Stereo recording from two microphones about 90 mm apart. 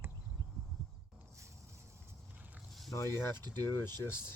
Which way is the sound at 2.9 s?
30° left (ahead or behind).